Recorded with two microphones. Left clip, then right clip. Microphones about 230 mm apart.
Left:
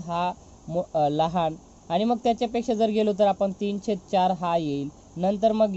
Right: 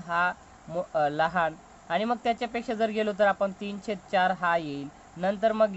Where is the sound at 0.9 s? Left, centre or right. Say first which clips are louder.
Left 2 dB; centre.